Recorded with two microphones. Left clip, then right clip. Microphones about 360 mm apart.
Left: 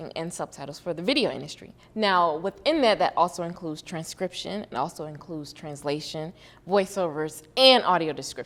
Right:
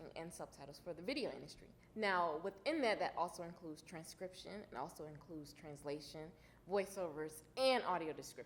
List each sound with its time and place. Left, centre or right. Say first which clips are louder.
0.0 s a woman's voice: left 17 dB; left
2.0 s a woman's voice: left 16 dB; left